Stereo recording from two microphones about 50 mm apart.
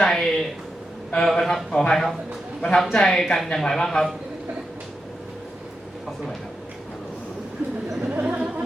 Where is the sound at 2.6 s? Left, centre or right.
Centre.